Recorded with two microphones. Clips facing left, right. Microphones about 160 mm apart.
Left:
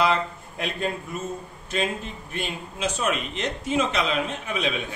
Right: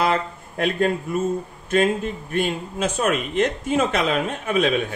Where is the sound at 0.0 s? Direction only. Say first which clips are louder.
Right 1 dB; 55° right (ahead or behind).